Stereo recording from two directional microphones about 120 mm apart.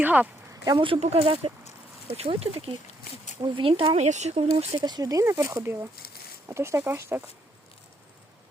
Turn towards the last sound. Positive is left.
turn(degrees=-20)  # may be behind; listen again after turning